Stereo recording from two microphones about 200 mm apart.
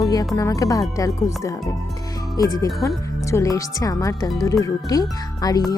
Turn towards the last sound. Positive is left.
turn(degrees=20)  # may be behind; listen again after turning